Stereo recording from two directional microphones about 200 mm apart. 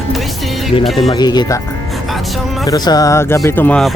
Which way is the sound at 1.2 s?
20° left (ahead or behind).